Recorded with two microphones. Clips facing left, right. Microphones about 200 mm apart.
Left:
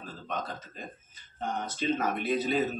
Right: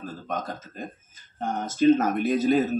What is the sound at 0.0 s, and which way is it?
Speech, 45° right (ahead or behind).